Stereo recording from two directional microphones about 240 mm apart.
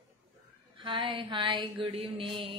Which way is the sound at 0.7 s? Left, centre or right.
Centre.